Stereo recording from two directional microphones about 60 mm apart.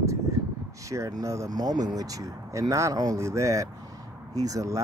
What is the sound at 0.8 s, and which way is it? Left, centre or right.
Speech, right.